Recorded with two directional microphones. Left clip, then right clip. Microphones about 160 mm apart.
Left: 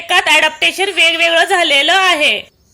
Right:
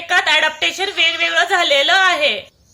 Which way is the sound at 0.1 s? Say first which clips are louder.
Left 3 dB; 25° left (ahead or behind).